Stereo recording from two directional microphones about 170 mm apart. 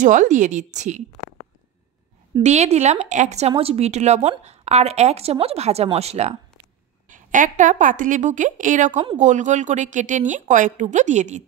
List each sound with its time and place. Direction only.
0.0 s a woman's voice: 50° right (ahead or behind)
2.4 s speech: 40° right (ahead or behind)
7.1 s a woman's voice: 50° right (ahead or behind)